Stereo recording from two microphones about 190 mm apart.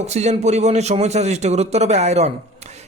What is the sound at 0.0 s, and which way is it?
Speech, 35° right (ahead or behind).